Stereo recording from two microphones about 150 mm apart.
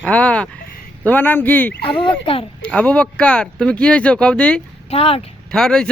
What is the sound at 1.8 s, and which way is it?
Speech, 35° left (ahead or behind).